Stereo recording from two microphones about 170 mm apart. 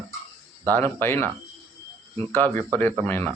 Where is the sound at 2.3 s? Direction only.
10° left (ahead or behind).